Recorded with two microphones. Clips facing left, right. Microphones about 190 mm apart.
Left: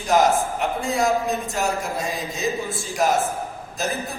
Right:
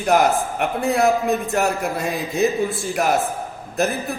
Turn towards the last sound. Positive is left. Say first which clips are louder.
# right 5 dB
turn(degrees=-60)  # may be behind; listen again after turning